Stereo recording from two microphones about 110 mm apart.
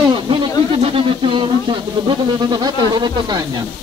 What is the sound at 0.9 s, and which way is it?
Speech, 50° right (ahead or behind).